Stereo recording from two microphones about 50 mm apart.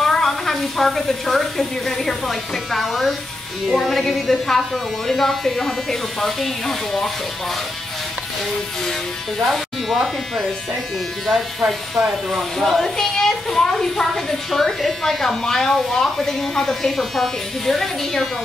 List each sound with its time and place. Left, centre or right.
0.0 s a woman's voice: centre
9.4 s a woman's voice: centre